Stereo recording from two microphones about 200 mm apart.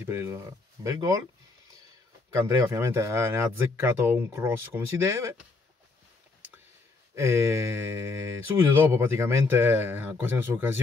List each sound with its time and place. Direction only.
0.0 s speech: 10° right (ahead or behind)
2.3 s speech: 15° right (ahead or behind)
7.2 s speech: 10° right (ahead or behind)